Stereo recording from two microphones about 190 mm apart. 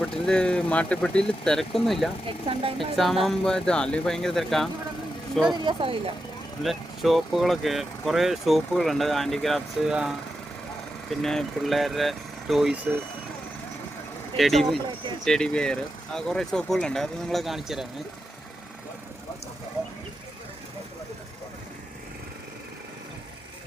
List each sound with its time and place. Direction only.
0.0 s speech: 5° left (ahead or behind)
5.5 s speech: 25° right (ahead or behind)
6.6 s speech: centre (ahead or behind)
14.3 s speech: centre (ahead or behind)